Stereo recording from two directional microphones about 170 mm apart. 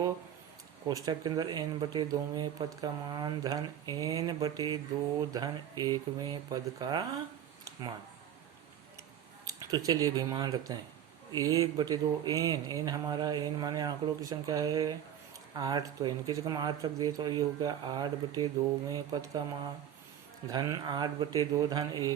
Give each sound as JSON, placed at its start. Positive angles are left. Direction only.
{"t": 0.9, "sound": "speech", "side_deg": -25}
{"t": 7.6, "sound": "a sound", "side_deg": -25}
{"t": 9.4, "sound": "speech", "side_deg": -20}
{"t": 20.5, "sound": "speech", "side_deg": -25}